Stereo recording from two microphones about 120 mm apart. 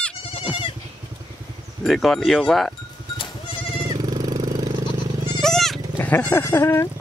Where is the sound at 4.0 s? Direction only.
35° right (ahead or behind).